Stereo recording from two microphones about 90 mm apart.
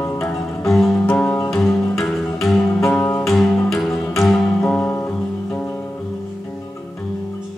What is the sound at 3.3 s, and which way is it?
Music, 5° left (ahead or behind).